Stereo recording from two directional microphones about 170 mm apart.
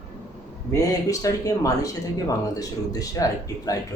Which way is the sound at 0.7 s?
20° left (ahead or behind).